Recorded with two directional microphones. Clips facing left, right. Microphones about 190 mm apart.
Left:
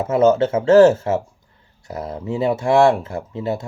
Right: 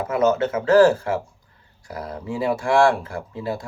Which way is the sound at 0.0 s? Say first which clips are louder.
Left 4 dB; 25° left (ahead or behind).